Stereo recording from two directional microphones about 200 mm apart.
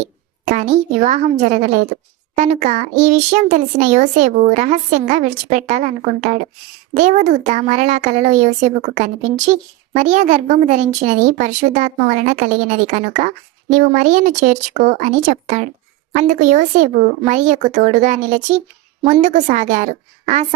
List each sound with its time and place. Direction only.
0.4 s speech: 40° right (ahead or behind)